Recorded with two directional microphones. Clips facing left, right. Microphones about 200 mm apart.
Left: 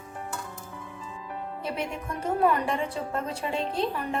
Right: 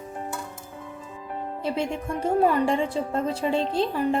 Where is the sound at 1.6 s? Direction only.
30° right (ahead or behind).